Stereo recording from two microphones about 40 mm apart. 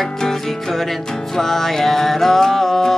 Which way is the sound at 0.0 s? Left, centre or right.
Centre.